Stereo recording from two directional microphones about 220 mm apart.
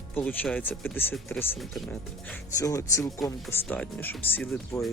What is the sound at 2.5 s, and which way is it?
Speech, 15° left (ahead or behind).